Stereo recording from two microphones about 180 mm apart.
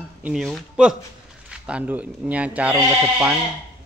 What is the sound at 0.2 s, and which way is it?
Speech, centre (ahead or behind).